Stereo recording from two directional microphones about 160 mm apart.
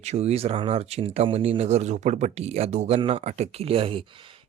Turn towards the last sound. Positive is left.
turn(degrees=-35)  # may be behind; listen again after turning